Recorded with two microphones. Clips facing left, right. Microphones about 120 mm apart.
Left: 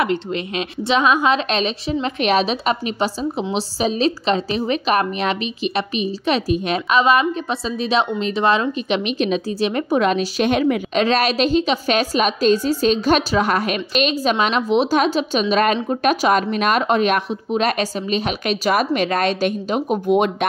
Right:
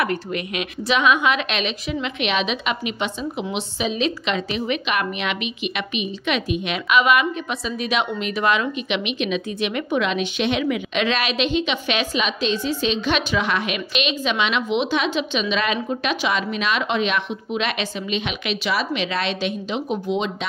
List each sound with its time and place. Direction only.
0.0 s a woman's voice: 25° left (ahead or behind); by 20.4 s 55° left (ahead or behind)